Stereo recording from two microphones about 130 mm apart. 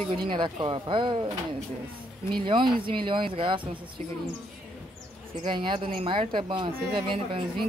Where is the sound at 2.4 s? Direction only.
40° right (ahead or behind).